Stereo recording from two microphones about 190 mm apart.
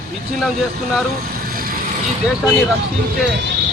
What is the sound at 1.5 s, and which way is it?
Vehicle, 50° right (ahead or behind).